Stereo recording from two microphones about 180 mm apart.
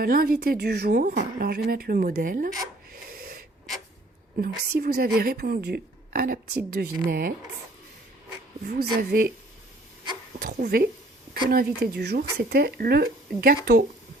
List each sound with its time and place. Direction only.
0.0 s speech: 55° right (ahead or behind)
2.9 s snort: 55° right (ahead or behind)
4.4 s speech: 55° right (ahead or behind)
8.6 s speech: 50° right (ahead or behind)
10.4 s speech: 55° right (ahead or behind)